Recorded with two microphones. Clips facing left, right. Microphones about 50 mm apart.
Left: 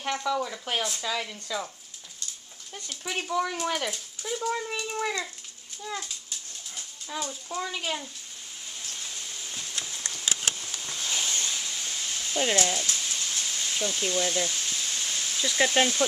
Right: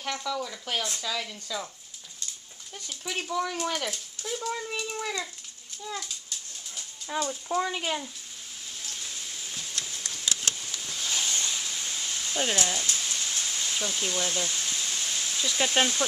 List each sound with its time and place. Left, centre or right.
0.0 s speech: centre
3.0 s speech: centre
7.1 s speech: centre
8.9 s a sound: centre
10.2 s vehicle: centre
11.4 s a sound: centre
12.4 s speech: centre
12.8 s a sound: centre
15.7 s speech: centre